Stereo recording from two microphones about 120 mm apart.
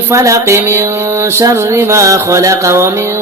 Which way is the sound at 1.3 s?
25° right (ahead or behind).